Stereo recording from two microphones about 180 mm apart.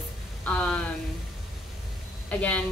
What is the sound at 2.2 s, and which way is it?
Speech, 10° left (ahead or behind).